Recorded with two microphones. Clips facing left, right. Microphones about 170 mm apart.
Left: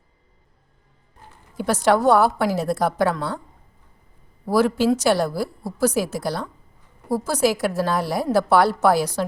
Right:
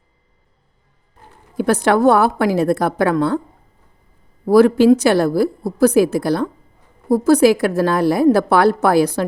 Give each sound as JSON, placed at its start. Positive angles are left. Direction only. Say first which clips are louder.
{"t": 1.6, "sound": "a woman's voice", "louder": "right 4 dB", "side_deg": -60}
{"t": 4.4, "sound": "a woman's voice", "louder": "right 8 dB", "side_deg": -55}